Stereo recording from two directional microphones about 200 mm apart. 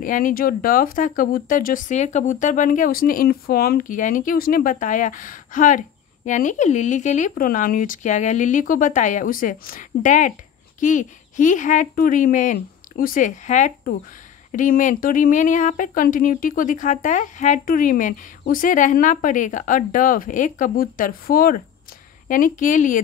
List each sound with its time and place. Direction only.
0.0 s speech: 45° left (ahead or behind)